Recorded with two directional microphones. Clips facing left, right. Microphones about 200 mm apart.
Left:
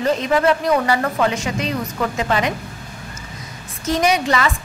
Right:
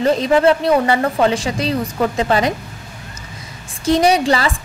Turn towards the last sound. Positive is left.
turn(degrees=-30)  # may be behind; listen again after turning